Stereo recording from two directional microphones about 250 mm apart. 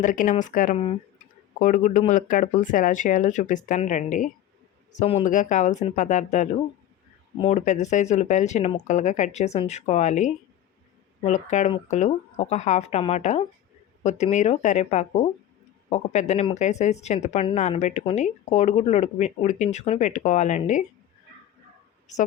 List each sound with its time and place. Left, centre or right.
0.0 s speech: left